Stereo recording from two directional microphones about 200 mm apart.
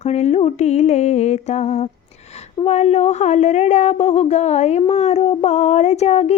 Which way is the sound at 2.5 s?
30° left (ahead or behind).